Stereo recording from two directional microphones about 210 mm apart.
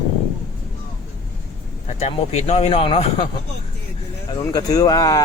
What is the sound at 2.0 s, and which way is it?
Speech, 30° left (ahead or behind).